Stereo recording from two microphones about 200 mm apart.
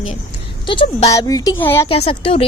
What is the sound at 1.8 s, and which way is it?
Speech, 30° left (ahead or behind).